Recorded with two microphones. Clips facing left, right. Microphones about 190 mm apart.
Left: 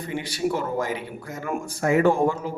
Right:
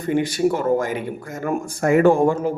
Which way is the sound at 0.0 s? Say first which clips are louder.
Right 8 dB; 45° right (ahead or behind).